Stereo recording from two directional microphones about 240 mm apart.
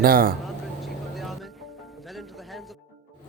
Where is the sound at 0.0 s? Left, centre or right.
Right.